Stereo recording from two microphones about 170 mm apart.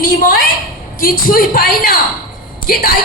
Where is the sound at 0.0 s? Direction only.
60° left (ahead or behind).